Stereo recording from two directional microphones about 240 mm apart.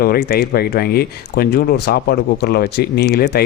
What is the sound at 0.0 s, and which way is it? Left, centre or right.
Speech, left.